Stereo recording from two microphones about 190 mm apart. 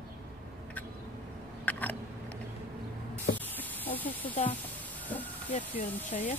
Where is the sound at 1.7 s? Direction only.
10° left (ahead or behind).